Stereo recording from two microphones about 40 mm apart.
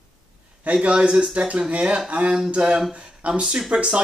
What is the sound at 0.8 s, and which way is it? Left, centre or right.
Speech, right.